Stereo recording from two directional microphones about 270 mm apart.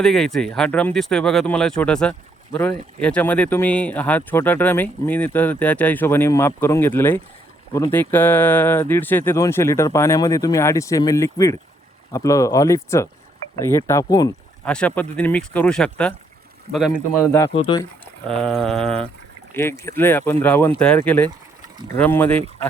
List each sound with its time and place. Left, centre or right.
0.0 s speech: centre
17.3 s speech: centre
18.3 s speech: centre